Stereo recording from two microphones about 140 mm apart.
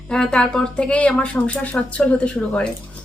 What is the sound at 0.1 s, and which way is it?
A woman's voice, 5° left (ahead or behind).